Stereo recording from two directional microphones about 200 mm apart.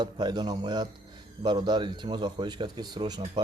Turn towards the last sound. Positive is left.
turn(degrees=-20)  # may be behind; listen again after turning